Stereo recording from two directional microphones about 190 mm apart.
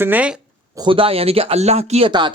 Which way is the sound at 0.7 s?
25° right (ahead or behind).